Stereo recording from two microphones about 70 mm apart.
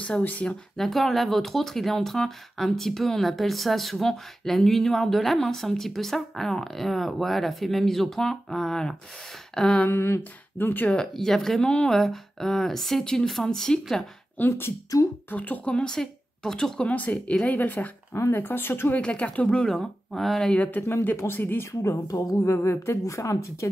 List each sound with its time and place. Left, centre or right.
0.2 s speech: left
0.7 s speech: centre
9.8 s speech: left
10.9 s speech: centre
14.4 s speech: left
14.9 s speech: left
15.2 s speech: left
16.9 s speech: left
18.9 s speech: centre
20.4 s speech: centre
21.2 s speech: left
22.0 s a woman's voice: left